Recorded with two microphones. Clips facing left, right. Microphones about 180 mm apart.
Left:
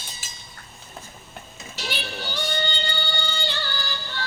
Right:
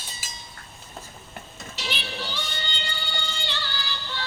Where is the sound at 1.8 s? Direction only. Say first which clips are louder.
Left 1 dB; 50° left (ahead or behind).